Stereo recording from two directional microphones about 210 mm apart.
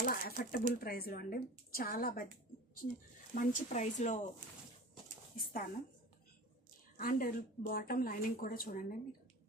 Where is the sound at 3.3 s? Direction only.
35° left (ahead or behind).